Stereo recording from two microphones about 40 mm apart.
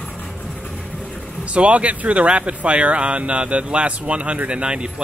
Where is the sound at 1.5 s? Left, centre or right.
Right.